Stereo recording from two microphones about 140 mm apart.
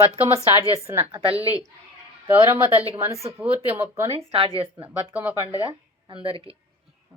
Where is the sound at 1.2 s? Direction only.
40° right (ahead or behind).